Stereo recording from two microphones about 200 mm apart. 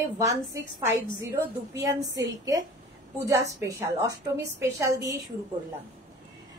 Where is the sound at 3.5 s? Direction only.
15° right (ahead or behind).